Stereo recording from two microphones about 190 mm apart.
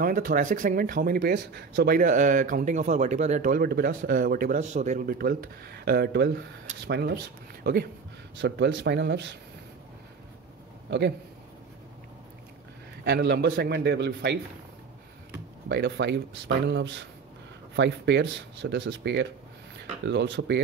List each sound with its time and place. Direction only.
0.0 s a man's voice: 50° right (ahead or behind)
8.4 s speech: 70° right (ahead or behind)
10.9 s a man's voice: 65° right (ahead or behind)
13.0 s a man's voice: 65° right (ahead or behind)
15.7 s a man's voice: 65° right (ahead or behind)